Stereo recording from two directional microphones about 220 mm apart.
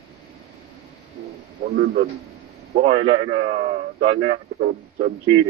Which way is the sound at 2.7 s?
25° right (ahead or behind).